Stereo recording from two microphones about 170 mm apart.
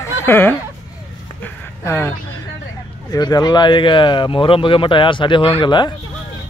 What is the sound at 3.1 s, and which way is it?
Speech, 25° left (ahead or behind).